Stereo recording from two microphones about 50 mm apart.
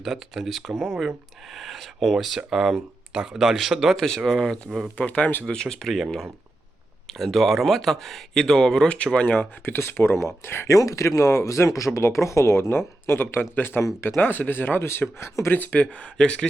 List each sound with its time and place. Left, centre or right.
0.0 s speech: centre
3.9 s speech: centre
4.9 s speech: left
5.5 s speech: centre
7.1 s speech: centre
9.1 s speech: left
9.6 s speech: left
10.7 s speech: left
11.9 s speech: left
13.6 s speech: left
13.8 s speech: left
14.2 s speech: left; by 16.5 s centre